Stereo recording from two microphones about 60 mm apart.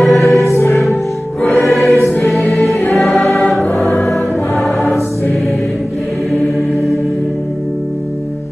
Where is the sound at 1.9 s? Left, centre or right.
Left.